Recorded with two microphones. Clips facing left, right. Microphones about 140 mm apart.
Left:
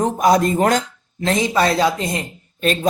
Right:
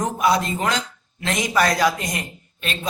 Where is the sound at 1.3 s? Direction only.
30° left (ahead or behind).